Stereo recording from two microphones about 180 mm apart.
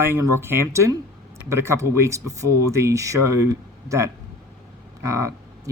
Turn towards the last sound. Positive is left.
turn(degrees=-15)  # may be behind; listen again after turning